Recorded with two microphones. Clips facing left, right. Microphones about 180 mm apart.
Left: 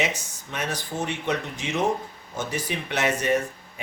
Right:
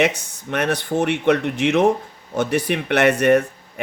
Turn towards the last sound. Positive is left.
turn(degrees=-65)  # may be behind; listen again after turning